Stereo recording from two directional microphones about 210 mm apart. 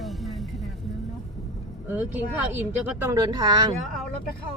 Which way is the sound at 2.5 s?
15° right (ahead or behind).